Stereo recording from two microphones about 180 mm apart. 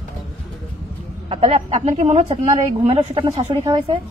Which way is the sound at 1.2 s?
35° right (ahead or behind).